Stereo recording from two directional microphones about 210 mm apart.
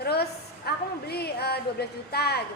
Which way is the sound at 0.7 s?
50° left (ahead or behind).